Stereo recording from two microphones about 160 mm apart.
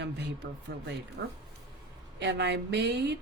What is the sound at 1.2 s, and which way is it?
Speech, 90° right.